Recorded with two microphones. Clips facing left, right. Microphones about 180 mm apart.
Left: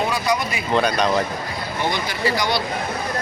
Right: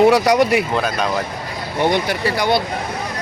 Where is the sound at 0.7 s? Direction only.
5° right (ahead or behind).